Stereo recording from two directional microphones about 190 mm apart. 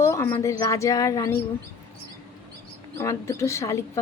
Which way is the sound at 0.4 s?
15° left (ahead or behind).